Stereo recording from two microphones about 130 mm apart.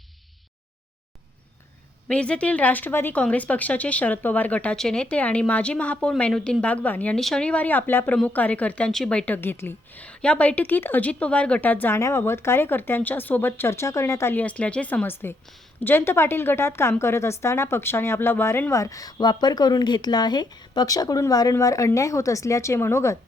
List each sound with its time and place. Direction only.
2.0 s a woman's voice: 10° left (ahead or behind)